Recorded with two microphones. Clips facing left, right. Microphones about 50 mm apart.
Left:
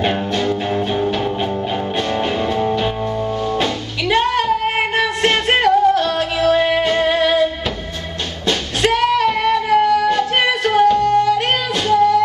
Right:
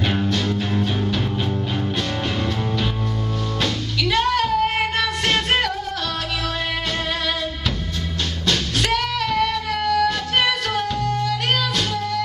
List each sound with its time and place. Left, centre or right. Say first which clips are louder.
0.0 s music: left 4 dB; centre
8.5 s music: left 5 dB; left